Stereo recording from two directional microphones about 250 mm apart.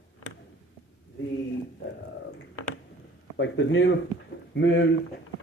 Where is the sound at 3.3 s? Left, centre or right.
Left.